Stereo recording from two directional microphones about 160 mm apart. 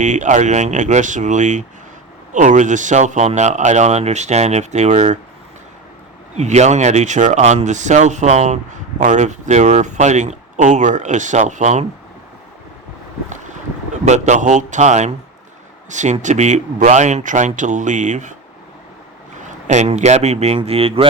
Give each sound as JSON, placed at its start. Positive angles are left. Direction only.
{"t": 0.0, "sound": "speech", "side_deg": -50}
{"t": 6.3, "sound": "speech", "side_deg": -45}
{"t": 14.0, "sound": "speech", "side_deg": -45}
{"t": 19.4, "sound": "speech", "side_deg": -45}